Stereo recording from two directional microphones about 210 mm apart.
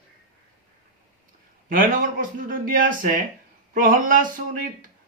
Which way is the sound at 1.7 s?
40° right (ahead or behind).